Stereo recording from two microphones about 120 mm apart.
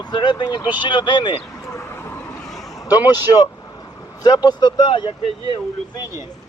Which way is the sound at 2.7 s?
30° left (ahead or behind).